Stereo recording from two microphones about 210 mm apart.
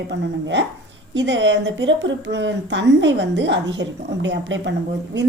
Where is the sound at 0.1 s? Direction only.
55° right (ahead or behind).